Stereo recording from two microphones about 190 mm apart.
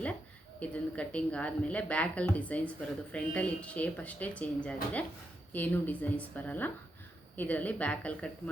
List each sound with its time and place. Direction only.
0.6 s a woman's voice: 5° left (ahead or behind)